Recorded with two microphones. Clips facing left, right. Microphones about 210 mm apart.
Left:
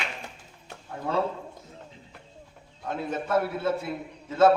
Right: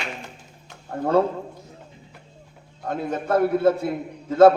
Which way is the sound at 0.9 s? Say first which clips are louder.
Right 8 dB; 50° right (ahead or behind).